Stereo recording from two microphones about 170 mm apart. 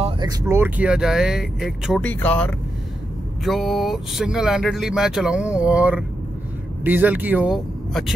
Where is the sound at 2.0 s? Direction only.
10° left (ahead or behind).